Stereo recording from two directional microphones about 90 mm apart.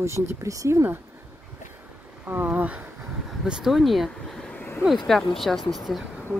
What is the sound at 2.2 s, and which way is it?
Speech, 20° right (ahead or behind).